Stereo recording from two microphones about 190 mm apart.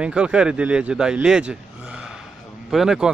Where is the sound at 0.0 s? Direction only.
5° right (ahead or behind).